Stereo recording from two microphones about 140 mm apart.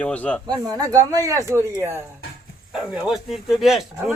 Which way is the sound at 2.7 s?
Centre (ahead or behind).